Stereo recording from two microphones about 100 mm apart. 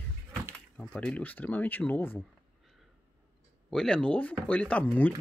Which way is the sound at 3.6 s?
5° left (ahead or behind).